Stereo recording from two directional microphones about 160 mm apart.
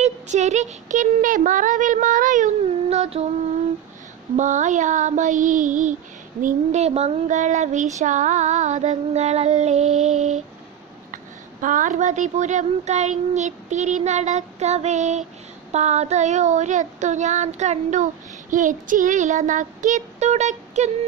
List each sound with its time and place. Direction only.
0.0 s child singing: 45° right (ahead or behind)
4.4 s child singing: 50° right (ahead or behind)
11.6 s child singing: 55° right (ahead or behind)